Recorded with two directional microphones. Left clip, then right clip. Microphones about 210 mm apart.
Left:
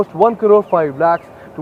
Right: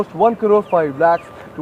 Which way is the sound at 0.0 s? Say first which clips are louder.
Left 2 dB; 50° left (ahead or behind).